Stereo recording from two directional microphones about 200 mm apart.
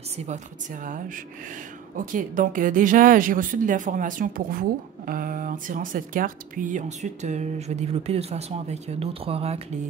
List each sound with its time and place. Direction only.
0.2 s a woman's voice: 40° right (ahead or behind)